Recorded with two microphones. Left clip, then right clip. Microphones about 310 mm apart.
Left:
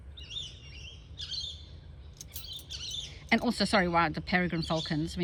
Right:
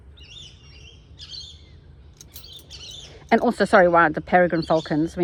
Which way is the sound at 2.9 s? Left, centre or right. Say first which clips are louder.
Left 1 dB; centre.